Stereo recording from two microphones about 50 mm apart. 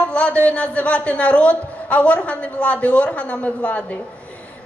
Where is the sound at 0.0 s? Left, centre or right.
Left.